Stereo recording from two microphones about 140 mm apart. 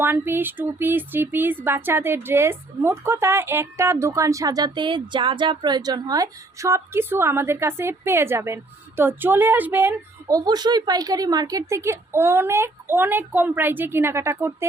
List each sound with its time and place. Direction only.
0.0 s speech: 15° right (ahead or behind)